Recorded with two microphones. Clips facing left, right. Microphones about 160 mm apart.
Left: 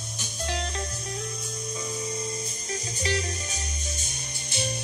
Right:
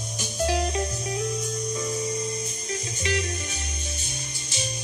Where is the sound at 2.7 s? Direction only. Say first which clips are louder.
Right 1 dB; 35° left (ahead or behind).